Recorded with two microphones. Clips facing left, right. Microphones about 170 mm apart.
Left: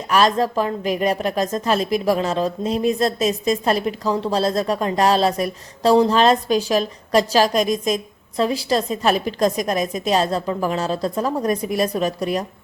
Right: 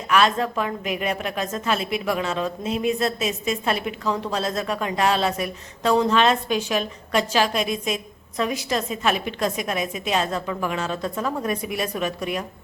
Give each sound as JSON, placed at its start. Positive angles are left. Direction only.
{"t": 0.1, "sound": "a woman's voice", "side_deg": 35}